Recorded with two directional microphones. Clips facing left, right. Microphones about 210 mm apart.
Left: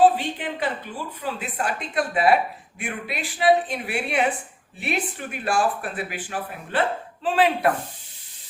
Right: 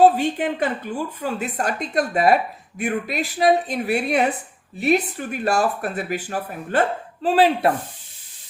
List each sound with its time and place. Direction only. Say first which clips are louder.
0.0 s a woman's voice: right 3 dB; 45° right (ahead or behind)